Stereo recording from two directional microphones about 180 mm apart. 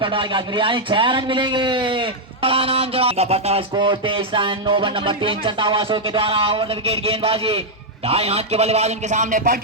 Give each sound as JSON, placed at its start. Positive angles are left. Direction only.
{"t": 0.0, "sound": "a man's voice", "side_deg": -30}